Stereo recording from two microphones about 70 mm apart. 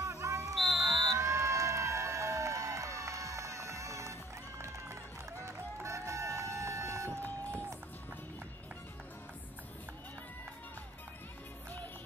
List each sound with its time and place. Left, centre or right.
0.0 s music: right
0.6 s music: centre
1.0 s crowd: right
5.4 s music: right